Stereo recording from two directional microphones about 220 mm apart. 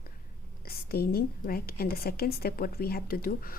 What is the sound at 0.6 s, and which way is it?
A woman's voice, 45° left (ahead or behind).